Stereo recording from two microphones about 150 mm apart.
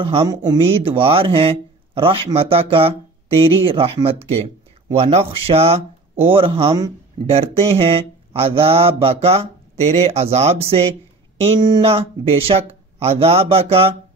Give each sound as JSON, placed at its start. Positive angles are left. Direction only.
{"t": 0.0, "sound": "speech", "side_deg": -35}
{"t": 11.4, "sound": "speech", "side_deg": -30}